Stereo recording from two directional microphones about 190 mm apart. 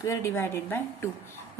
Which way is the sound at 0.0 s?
15° left (ahead or behind).